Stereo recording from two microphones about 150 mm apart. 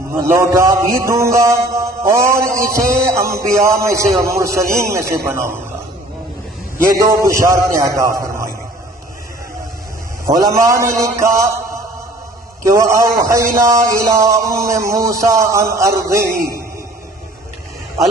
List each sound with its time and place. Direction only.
0.1 s a man's voice: 15° right (ahead or behind)
6.9 s a man's voice: 20° right (ahead or behind)
10.2 s a man's voice: 25° right (ahead or behind)